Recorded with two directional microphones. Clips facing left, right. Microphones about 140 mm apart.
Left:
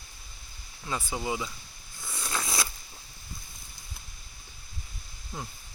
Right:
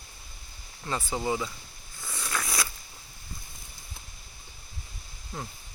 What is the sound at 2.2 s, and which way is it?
Biting, 25° left (ahead or behind).